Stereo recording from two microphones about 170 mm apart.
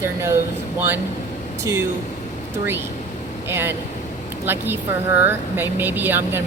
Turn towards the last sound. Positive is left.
turn(degrees=-10)  # may be behind; listen again after turning